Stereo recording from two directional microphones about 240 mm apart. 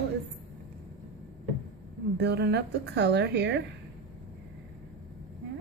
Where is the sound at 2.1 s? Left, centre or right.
Right.